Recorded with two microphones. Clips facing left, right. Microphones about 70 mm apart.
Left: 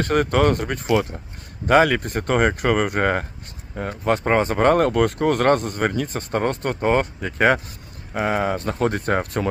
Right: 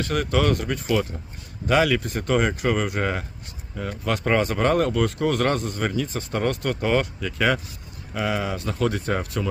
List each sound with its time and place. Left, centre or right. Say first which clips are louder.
0.0 s speech: left 4 dB; left